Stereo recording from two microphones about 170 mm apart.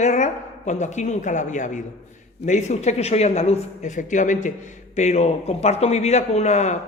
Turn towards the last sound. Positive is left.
turn(degrees=45)  # may be behind; listen again after turning